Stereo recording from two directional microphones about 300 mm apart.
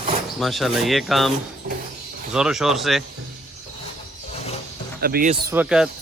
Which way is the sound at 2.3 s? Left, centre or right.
Centre.